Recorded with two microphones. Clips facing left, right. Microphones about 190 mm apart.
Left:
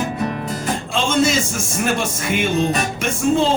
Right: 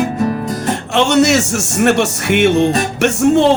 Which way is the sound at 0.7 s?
75° right (ahead or behind).